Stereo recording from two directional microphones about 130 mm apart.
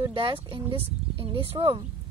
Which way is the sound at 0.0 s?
40° right (ahead or behind).